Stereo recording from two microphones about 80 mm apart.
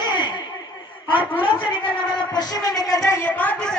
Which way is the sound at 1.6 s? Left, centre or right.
Left.